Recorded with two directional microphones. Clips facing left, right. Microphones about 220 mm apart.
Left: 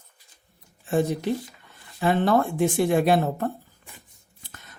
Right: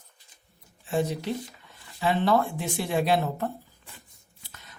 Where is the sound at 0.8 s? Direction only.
50° left (ahead or behind).